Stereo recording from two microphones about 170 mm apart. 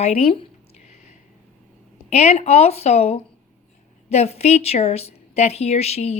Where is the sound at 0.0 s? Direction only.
35° left (ahead or behind).